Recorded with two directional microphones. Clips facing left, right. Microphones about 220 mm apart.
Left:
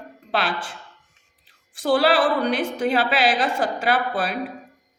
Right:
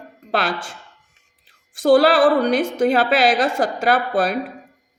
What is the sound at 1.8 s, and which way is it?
A woman's voice, 45° right (ahead or behind).